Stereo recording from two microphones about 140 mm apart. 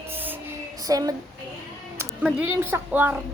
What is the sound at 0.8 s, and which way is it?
Female singing, 25° right (ahead or behind).